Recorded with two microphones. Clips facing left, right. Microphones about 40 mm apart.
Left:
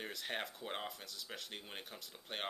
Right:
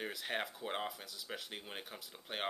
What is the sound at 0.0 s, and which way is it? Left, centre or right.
Speech, centre.